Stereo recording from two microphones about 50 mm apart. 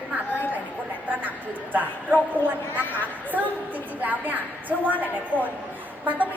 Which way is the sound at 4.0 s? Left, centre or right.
Right.